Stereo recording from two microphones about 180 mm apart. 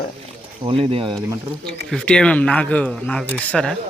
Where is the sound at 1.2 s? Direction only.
15° right (ahead or behind).